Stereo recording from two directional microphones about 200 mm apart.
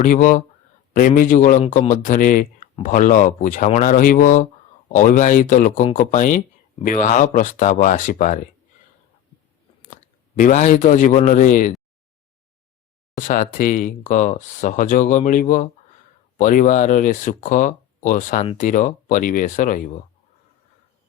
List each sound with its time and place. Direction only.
0.0 s a man's voice: 40° left (ahead or behind)
9.9 s speech: 40° left (ahead or behind)
13.1 s speech: 40° left (ahead or behind)